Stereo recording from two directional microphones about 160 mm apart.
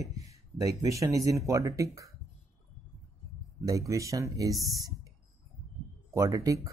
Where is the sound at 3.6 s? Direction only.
20° right (ahead or behind).